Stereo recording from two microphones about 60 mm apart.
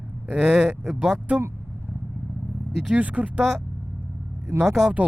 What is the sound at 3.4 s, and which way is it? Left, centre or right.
Speech, centre.